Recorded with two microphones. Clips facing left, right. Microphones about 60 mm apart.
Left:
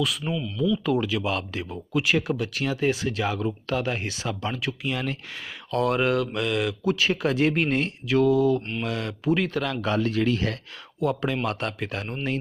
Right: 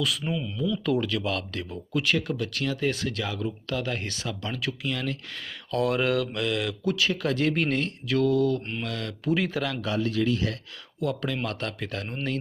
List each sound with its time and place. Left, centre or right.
0.0 s speech: centre
0.3 s speech: centre
0.7 s speech: centre
1.3 s speech: left
1.9 s speech: centre
3.7 s speech: left
3.9 s speech: centre
5.7 s speech: centre
6.9 s speech: left
7.5 s speech: centre
9.3 s speech: centre
9.8 s speech: left
11.3 s speech: left